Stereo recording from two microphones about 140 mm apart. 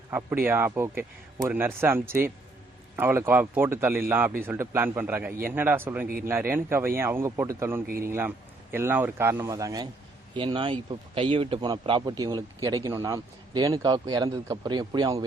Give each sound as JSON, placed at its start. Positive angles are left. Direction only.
{"t": 0.1, "sound": "a man's voice", "side_deg": -15}